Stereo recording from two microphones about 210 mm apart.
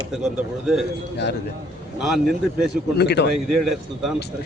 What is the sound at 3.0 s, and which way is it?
Speech, 50° left (ahead or behind).